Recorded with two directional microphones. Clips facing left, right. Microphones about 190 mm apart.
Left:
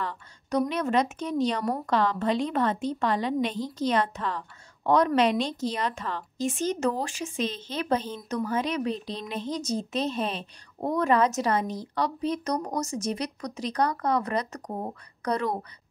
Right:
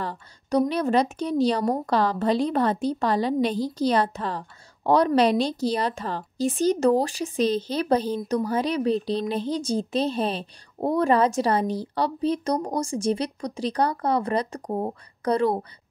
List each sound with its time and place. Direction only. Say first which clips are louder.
0.0 s a woman's voice: right 2 dB; 35° right (ahead or behind)